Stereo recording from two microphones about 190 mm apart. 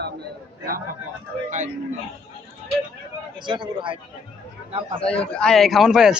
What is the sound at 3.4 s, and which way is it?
Speech, 25° right (ahead or behind).